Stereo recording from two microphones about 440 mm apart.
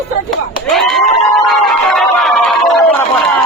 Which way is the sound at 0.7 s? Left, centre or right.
Centre.